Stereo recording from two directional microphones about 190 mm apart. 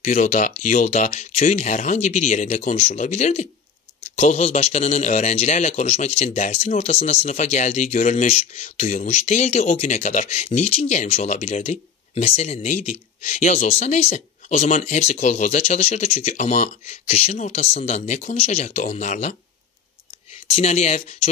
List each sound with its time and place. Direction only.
0.0 s speech: 40° left (ahead or behind)
20.5 s speech: 35° left (ahead or behind)